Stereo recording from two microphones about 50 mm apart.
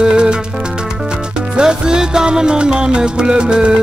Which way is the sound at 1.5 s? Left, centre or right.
Centre.